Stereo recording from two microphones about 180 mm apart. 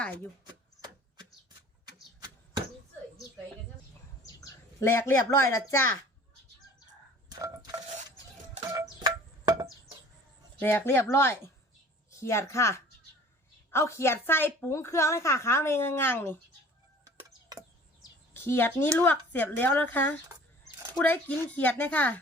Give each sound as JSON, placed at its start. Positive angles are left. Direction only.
{"t": 1.8, "sound": "a sound", "side_deg": -25}
{"t": 4.4, "sound": "speech", "side_deg": 15}
{"t": 7.3, "sound": "coin", "side_deg": -20}
{"t": 10.6, "sound": "a woman's voice", "side_deg": 10}
{"t": 18.3, "sound": "a woman's voice", "side_deg": 10}